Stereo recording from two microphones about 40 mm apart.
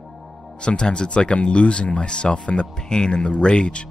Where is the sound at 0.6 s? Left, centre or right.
Left.